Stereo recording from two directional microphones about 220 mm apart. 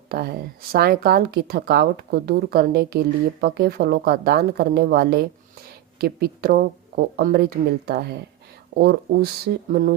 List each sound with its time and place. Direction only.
0.1 s speech: 45° right (ahead or behind)